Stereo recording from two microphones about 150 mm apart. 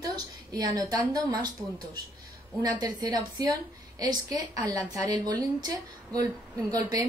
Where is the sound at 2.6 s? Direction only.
25° right (ahead or behind).